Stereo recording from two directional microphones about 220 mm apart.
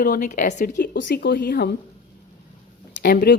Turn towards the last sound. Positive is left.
turn(degrees=45)  # may be behind; listen again after turning